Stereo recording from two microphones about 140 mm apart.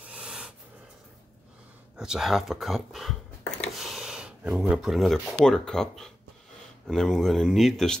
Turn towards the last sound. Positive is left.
turn(degrees=0)  # may be behind; listen again after turning